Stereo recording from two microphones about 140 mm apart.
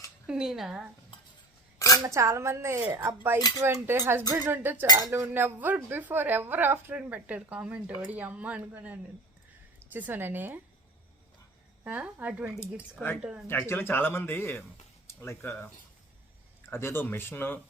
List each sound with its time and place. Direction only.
0.3 s speech: 5° right (ahead or behind)
2.0 s speech: 20° right (ahead or behind)
11.8 s speech: 10° right (ahead or behind)
13.5 s speech: 15° left (ahead or behind)